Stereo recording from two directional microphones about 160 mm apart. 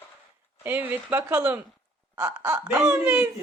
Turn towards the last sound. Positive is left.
turn(degrees=-10)  # may be behind; listen again after turning